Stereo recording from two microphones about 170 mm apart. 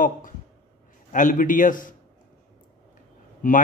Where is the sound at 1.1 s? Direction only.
50° left (ahead or behind).